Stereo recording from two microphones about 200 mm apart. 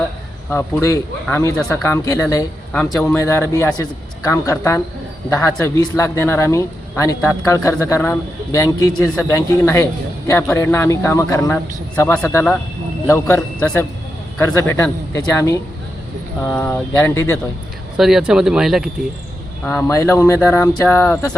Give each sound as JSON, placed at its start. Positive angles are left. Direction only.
{"t": 0.5, "sound": "speech", "side_deg": 15}
{"t": 2.7, "sound": "speech", "side_deg": 5}
{"t": 3.2, "sound": "speech", "side_deg": 15}
{"t": 17.9, "sound": "speech", "side_deg": 0}
{"t": 19.9, "sound": "speech", "side_deg": 15}